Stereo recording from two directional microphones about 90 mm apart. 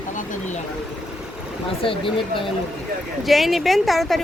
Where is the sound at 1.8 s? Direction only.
75° left (ahead or behind).